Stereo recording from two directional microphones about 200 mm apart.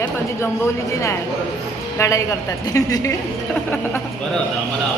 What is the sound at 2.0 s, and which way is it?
A woman's voice, 15° left (ahead or behind).